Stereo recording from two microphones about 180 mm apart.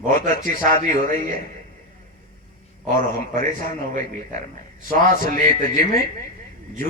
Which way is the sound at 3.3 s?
45° right (ahead or behind).